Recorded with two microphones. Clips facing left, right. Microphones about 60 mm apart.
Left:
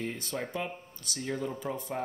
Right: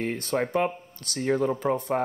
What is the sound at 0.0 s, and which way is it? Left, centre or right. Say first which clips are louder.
Speech: right 8 dB; right.